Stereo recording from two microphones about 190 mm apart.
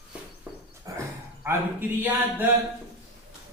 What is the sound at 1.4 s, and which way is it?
Speech, 15° right (ahead or behind).